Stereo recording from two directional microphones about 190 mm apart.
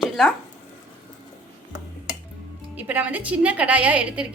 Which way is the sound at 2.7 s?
10° right (ahead or behind).